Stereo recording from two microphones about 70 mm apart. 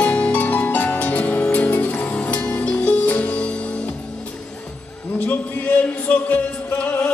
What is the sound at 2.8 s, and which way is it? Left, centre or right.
Music, centre.